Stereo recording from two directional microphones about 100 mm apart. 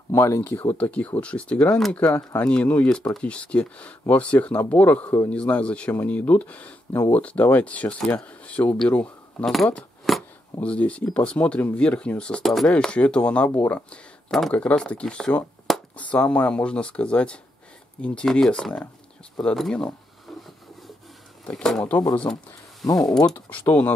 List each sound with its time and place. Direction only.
0.1 s speech: 25° left (ahead or behind)
0.6 s speech: 20° left (ahead or behind)
10.1 s a sound: centre (ahead or behind)
10.6 s speech: 10° left (ahead or behind)
21.5 s speech: 10° left (ahead or behind)